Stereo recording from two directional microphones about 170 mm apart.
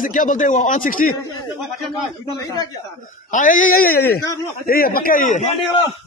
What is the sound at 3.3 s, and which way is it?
A man's voice, 50° left (ahead or behind).